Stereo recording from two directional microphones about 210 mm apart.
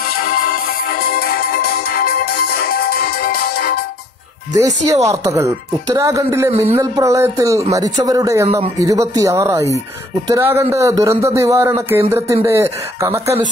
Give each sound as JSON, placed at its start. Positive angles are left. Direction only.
{"t": 0.2, "sound": "music", "side_deg": 45}
{"t": 4.6, "sound": "a man's voice", "side_deg": -15}